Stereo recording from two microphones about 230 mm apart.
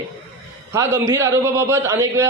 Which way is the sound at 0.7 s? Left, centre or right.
Centre.